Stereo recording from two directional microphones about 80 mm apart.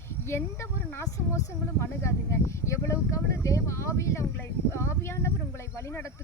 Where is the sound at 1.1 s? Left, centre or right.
Left.